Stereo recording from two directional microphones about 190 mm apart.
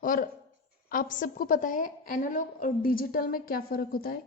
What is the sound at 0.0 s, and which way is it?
A woman's voice, 45° left (ahead or behind).